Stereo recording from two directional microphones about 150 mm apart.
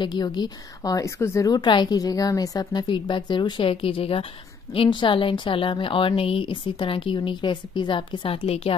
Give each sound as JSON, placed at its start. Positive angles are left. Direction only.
{"t": 0.0, "sound": "a woman's voice", "side_deg": 30}